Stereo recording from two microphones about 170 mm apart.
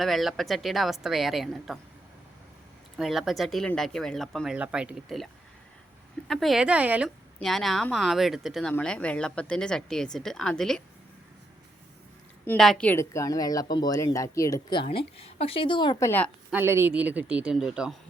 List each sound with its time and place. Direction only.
0.0 s speech: centre (ahead or behind)
3.0 s speech: centre (ahead or behind)
12.5 s a woman's voice: 5° left (ahead or behind); by 16.0 s 25° left (ahead or behind)
16.0 s a woman's voice: 10° left (ahead or behind)
16.5 s speech: 15° right (ahead or behind)